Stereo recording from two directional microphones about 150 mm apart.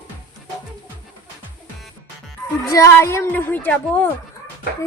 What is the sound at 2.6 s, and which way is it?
A woman's voice, 20° left (ahead or behind).